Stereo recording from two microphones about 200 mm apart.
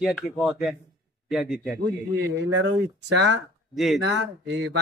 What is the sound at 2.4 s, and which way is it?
Speech, 70° right (ahead or behind).